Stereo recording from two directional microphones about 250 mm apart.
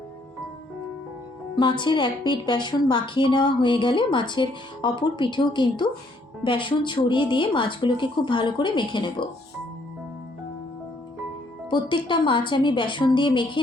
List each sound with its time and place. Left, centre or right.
1.5 s a woman's voice: centre
11.7 s a woman's voice: centre